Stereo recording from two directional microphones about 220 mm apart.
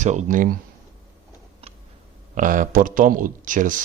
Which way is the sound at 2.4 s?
35° right (ahead or behind).